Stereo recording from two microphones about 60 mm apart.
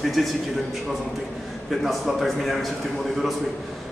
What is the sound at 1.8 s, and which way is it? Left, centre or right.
Speech, centre.